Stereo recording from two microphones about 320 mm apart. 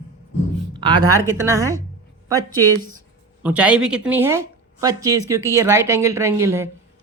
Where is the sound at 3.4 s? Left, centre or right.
Centre.